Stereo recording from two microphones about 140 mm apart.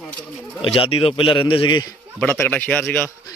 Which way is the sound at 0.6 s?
40° left (ahead or behind).